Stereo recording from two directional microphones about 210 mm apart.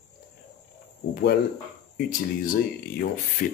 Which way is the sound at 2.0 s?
45° left (ahead or behind).